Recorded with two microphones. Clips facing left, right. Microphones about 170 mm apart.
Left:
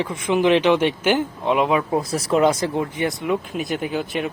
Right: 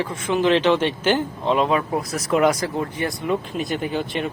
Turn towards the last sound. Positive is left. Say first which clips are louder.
# even
turn(degrees=5)  # may be behind; listen again after turning